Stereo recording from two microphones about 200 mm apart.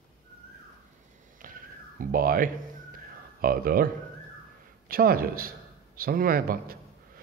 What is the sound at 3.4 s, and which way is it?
Speech, 45° right (ahead or behind).